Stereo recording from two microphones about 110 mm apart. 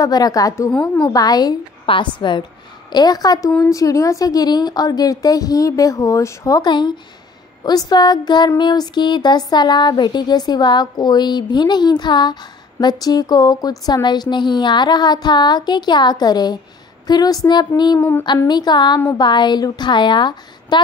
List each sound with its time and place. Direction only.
0.0 s speech: 35° left (ahead or behind)
1.9 s a woman's voice: 45° left (ahead or behind)
17.9 s a sound: 20° left (ahead or behind)
18.5 s a woman's voice: 40° left (ahead or behind)